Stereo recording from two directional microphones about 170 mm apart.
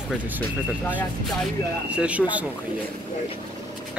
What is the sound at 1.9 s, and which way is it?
Speech, 5° right (ahead or behind).